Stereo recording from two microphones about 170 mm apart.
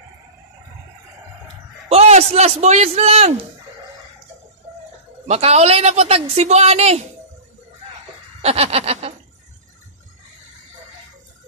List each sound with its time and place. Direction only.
1.9 s speech: 40° right (ahead or behind)
5.3 s speech: 40° right (ahead or behind)
8.4 s a sound: 35° right (ahead or behind)